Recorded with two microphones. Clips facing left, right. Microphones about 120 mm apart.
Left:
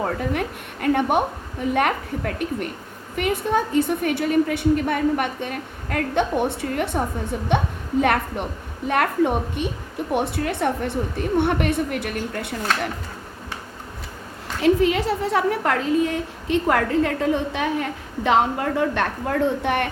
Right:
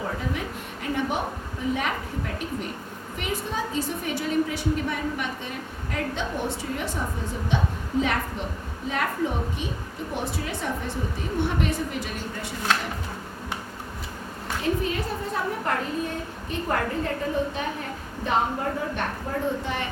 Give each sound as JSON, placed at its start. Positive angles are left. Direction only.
{"t": 0.0, "sound": "a sound", "side_deg": 60}
{"t": 1.7, "sound": "a woman's voice", "side_deg": 60}
{"t": 14.6, "sound": "a woman's voice", "side_deg": 90}